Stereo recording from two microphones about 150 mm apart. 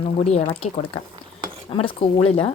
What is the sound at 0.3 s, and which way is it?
A woman's voice, 40° left (ahead or behind).